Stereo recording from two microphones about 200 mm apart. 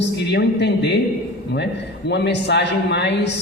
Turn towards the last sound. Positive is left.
turn(degrees=60)  # may be behind; listen again after turning